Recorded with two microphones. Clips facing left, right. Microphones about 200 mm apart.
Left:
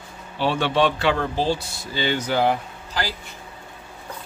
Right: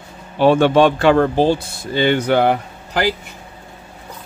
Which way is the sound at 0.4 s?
50° right (ahead or behind).